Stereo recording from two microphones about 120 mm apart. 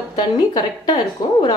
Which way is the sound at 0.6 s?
35° left (ahead or behind).